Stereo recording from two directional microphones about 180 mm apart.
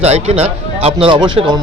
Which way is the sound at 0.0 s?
35° right (ahead or behind).